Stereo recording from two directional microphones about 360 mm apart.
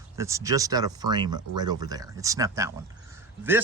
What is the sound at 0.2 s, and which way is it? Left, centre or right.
Speech, centre.